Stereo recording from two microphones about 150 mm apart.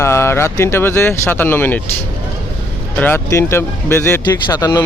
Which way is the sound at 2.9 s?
15° left (ahead or behind).